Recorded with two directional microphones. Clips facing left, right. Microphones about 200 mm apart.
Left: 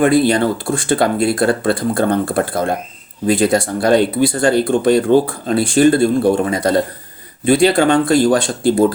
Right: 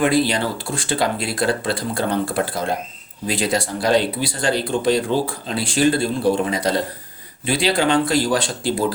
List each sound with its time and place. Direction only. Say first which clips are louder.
0.0 s speech: left 6 dB; 50° left (ahead or behind)